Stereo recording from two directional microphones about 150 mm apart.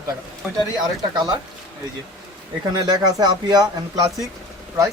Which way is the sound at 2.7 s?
25° right (ahead or behind).